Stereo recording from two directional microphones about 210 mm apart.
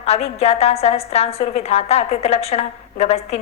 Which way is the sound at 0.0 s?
30° left (ahead or behind).